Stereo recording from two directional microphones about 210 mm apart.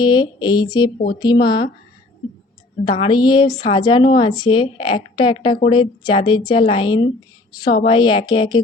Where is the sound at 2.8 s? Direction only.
25° left (ahead or behind).